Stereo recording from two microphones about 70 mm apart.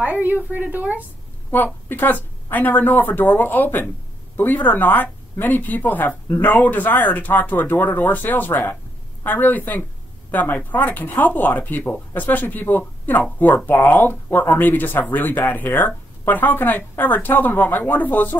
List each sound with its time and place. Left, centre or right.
0.0 s a woman's voice: right
1.5 s speech: left